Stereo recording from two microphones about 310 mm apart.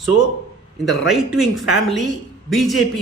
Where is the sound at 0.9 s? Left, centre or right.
Centre.